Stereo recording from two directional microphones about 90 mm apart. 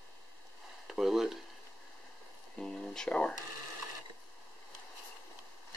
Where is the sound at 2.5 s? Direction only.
5° left (ahead or behind).